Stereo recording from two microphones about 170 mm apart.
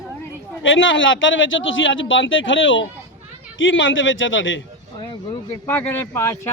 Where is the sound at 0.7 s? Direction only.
90° left.